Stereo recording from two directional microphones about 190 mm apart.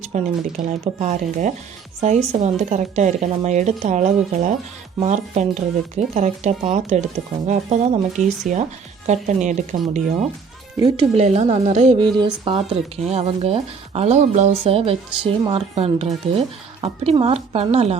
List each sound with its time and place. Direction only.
0.0 s a woman's voice: 35° right (ahead or behind)